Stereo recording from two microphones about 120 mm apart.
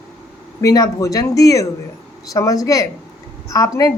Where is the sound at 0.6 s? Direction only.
30° left (ahead or behind).